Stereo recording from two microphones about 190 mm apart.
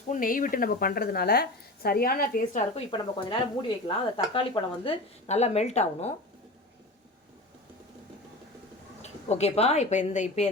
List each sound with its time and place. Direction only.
0.1 s a woman's voice: 45° left (ahead or behind)
2.9 s speech: 25° left (ahead or behind)
9.0 s speech: 35° left (ahead or behind)